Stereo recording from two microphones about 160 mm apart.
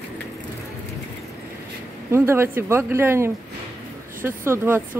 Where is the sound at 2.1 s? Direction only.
15° right (ahead or behind).